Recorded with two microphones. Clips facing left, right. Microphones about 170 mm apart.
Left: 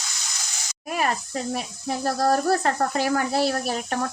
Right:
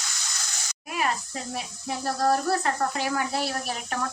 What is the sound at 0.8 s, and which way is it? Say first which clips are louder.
Speech: left 3 dB; 50° left (ahead or behind).